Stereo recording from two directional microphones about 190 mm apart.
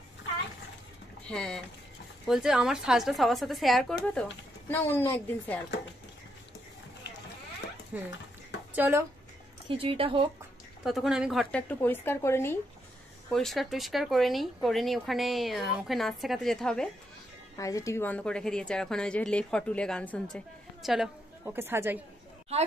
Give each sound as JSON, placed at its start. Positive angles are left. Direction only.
{"t": 1.2, "sound": "a woman's voice", "side_deg": 5}
{"t": 7.9, "sound": "a woman's voice", "side_deg": -5}
{"t": 9.7, "sound": "speech", "side_deg": -30}
{"t": 10.8, "sound": "speech", "side_deg": 0}
{"t": 11.8, "sound": "a woman's voice", "side_deg": 10}
{"t": 13.3, "sound": "speech", "side_deg": 0}
{"t": 17.6, "sound": "speech", "side_deg": 15}
{"t": 21.5, "sound": "a woman's voice", "side_deg": -10}